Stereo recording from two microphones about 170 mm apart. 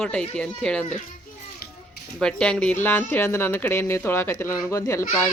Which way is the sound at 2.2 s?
5° left (ahead or behind).